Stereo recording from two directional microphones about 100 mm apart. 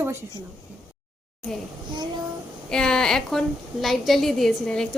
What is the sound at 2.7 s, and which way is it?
A woman's voice, 5° left (ahead or behind).